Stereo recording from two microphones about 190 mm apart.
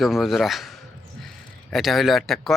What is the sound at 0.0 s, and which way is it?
Speech, centre (ahead or behind).